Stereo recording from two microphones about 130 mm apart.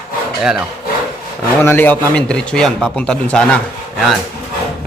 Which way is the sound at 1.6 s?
15° left (ahead or behind).